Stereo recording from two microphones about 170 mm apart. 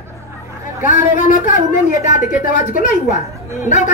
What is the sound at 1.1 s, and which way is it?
A woman's voice, 50° left (ahead or behind).